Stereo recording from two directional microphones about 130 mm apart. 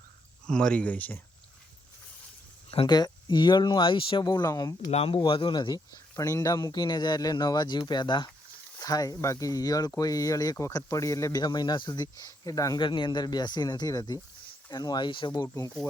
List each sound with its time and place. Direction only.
0.4 s speech: 5° left (ahead or behind)
2.8 s speech: 35° left (ahead or behind)
4.9 s speech: 50° left (ahead or behind)
15.4 s speech: 20° left (ahead or behind)